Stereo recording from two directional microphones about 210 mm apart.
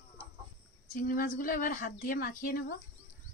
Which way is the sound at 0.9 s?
40° left (ahead or behind).